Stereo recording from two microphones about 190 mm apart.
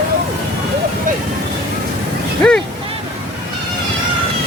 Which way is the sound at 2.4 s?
5° left (ahead or behind).